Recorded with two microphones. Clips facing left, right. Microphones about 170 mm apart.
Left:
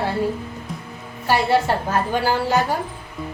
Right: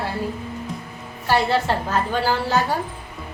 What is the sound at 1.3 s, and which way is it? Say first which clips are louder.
A woman's voice: left 1 dB; 15° left (ahead or behind).